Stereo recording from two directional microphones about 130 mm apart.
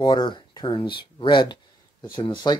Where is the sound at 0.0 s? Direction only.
35° left (ahead or behind).